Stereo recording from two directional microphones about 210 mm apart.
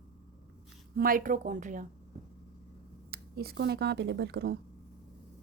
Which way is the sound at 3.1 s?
45° right (ahead or behind).